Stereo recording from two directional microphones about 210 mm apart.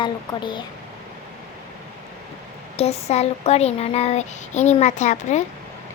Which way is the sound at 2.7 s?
30° left (ahead or behind).